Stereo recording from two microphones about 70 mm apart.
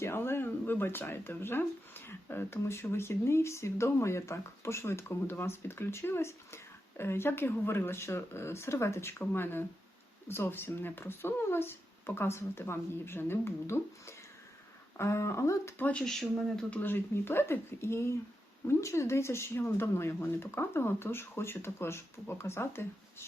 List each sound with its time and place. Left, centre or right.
0.0 s speech: left
9.2 s speech: left
15.8 s speech: centre
16.0 s speech: centre
16.6 s speech: centre
16.9 s speech: left